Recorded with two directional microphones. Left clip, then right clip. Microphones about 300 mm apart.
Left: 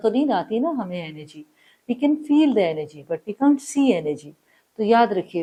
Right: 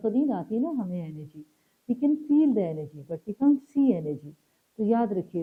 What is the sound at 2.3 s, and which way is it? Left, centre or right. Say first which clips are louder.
Speech: left 7 dB; centre.